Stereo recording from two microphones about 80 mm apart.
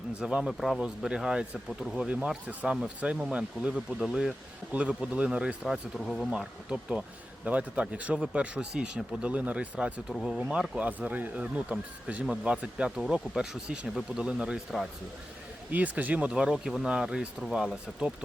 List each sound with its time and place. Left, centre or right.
0.2 s speech: centre
0.4 s speech: centre
6.0 s speech: centre
6.3 s speech: centre
10.1 s speech: centre
10.5 s speech: centre
15.7 s speech: centre